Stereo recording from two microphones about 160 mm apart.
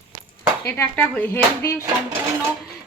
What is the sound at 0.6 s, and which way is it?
Speech, 15° left (ahead or behind).